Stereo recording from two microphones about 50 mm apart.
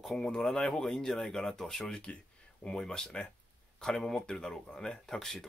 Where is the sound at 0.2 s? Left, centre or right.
Centre.